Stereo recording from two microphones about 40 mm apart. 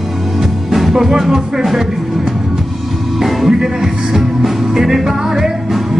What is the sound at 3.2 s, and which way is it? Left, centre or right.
Music, centre.